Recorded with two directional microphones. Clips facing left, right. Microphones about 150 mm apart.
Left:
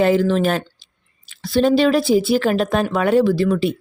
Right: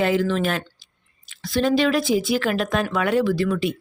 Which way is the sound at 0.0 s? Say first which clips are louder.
Left 5 dB; 35° left (ahead or behind).